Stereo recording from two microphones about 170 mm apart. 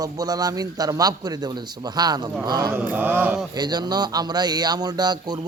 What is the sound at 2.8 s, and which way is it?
Mantra, 10° right (ahead or behind).